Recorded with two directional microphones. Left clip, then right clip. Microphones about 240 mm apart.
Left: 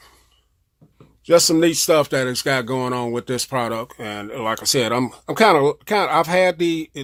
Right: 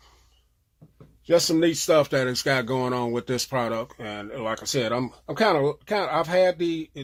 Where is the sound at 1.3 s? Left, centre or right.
Left.